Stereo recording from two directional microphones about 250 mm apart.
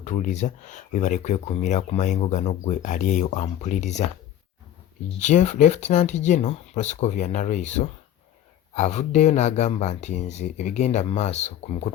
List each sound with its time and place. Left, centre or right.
0.0 s speech: left